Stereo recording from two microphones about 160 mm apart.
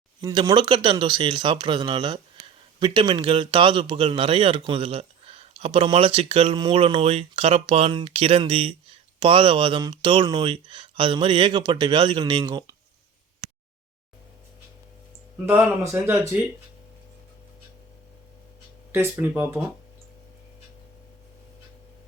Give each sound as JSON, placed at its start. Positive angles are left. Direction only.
{"t": 0.2, "sound": "a man's voice", "side_deg": -25}
{"t": 15.4, "sound": "speech", "side_deg": -5}
{"t": 15.8, "sound": "speech", "side_deg": -15}
{"t": 18.9, "sound": "speech", "side_deg": -15}